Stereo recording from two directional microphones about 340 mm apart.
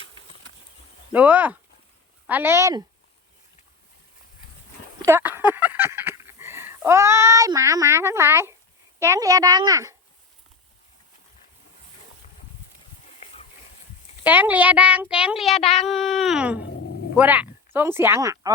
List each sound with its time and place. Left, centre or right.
1.1 s a child's voice: centre
5.0 s a sound: centre
9.0 s a child's voice: centre
14.3 s a child's voice: centre
15.5 s speech: centre
15.9 s a child's voice: centre